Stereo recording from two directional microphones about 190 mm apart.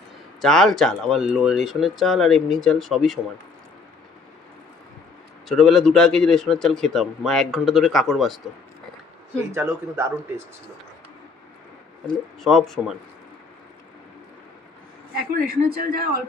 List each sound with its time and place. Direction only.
0.4 s a man's voice: centre (ahead or behind)
5.5 s a man's voice: centre (ahead or behind)
9.5 s speech: 15° right (ahead or behind)
12.4 s a man's voice: centre (ahead or behind)
15.3 s speech: 50° right (ahead or behind)